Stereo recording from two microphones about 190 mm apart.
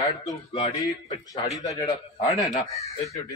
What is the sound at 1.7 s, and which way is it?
Speech, 20° left (ahead or behind).